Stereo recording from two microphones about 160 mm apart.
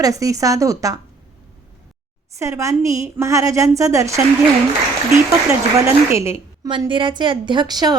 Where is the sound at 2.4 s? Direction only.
20° right (ahead or behind).